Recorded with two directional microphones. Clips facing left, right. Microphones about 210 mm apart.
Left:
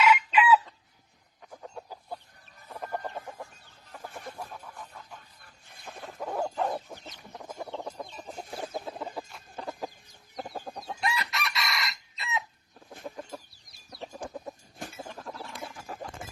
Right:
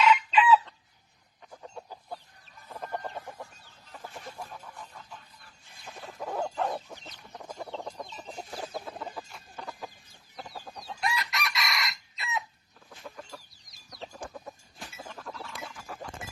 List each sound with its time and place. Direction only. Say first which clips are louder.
0.0 s chicken: even; 10° left (ahead or behind)
5.4 s a sound: left 1 dB; 55° left (ahead or behind)
6.1 s dog: left 1 dB; centre (ahead or behind)
6.8 s chicken: left 2 dB; 15° left (ahead or behind)
9.6 s chicken: left 5 dB; 35° left (ahead or behind)
10.3 s chicken: left 5 dB; 55° left (ahead or behind)
11.0 s chicken: even; centre (ahead or behind)
14.0 s chicken: left 3 dB; 20° left (ahead or behind)